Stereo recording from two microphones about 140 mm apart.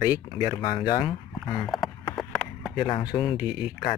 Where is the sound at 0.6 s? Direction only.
35° left (ahead or behind).